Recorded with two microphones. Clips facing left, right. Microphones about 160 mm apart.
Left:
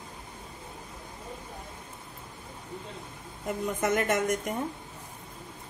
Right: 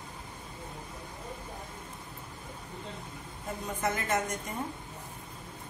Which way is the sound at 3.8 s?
75° left (ahead or behind).